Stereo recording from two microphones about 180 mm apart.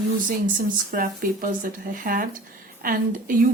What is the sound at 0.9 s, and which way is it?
A woman's voice, 50° right (ahead or behind).